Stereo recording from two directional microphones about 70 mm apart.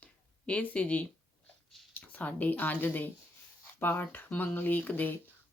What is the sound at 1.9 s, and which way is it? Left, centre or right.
Speech, left.